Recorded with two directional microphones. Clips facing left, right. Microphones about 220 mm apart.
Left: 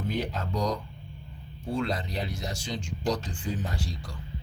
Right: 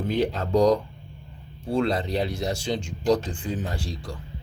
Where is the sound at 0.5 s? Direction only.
65° right (ahead or behind).